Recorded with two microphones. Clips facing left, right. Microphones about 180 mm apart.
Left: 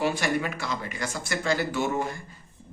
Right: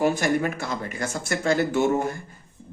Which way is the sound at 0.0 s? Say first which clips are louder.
Right 4 dB; 45° right (ahead or behind).